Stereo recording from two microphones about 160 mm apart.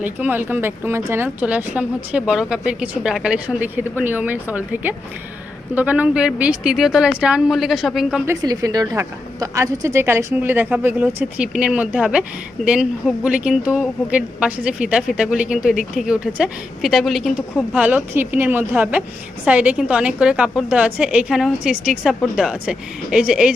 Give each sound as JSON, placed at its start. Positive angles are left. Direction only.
{"t": 0.0, "sound": "a woman's voice", "side_deg": -10}
{"t": 8.3, "sound": "a woman's voice", "side_deg": -20}
{"t": 17.7, "sound": "a woman's voice", "side_deg": -10}